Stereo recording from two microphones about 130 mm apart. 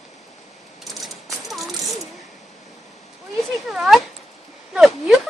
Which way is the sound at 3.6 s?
5° right (ahead or behind).